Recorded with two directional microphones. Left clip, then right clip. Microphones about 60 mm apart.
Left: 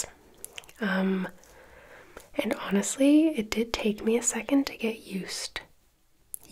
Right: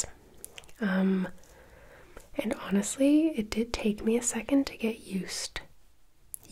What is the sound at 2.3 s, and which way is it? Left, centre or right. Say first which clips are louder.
Speech: left 3 dB; centre.